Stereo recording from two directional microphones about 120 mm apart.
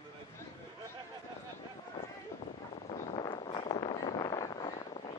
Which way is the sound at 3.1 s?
40° left (ahead or behind).